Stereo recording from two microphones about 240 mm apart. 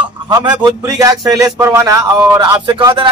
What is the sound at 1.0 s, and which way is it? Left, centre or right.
A man's voice, centre.